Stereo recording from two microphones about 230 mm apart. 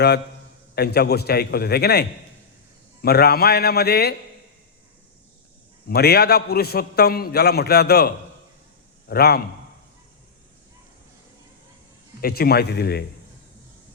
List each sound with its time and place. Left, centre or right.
0.8 s a man's voice: left
5.9 s a man's voice: left
12.2 s a man's voice: left